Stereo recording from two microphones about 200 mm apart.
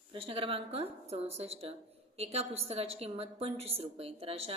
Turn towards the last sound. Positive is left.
turn(degrees=-30)  # may be behind; listen again after turning